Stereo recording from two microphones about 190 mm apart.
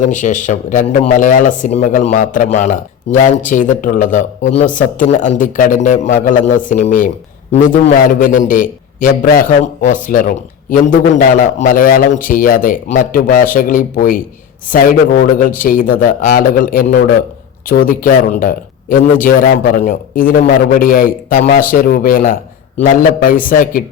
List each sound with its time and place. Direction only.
0.0 s a man's voice: 40° left (ahead or behind)